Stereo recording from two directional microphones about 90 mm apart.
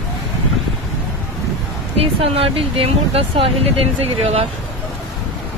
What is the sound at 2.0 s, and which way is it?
Speech, 90° right.